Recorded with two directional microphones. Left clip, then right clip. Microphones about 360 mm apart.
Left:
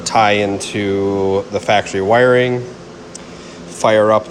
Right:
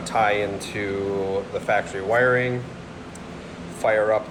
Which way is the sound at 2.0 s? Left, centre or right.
Left.